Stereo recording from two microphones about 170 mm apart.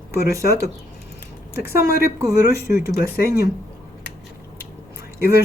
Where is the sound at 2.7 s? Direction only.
65° left (ahead or behind).